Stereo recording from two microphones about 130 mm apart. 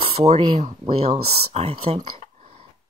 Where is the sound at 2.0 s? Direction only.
60° right (ahead or behind).